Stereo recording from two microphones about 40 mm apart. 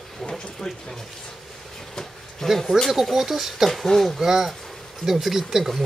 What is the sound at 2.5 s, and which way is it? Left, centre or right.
Speech, centre.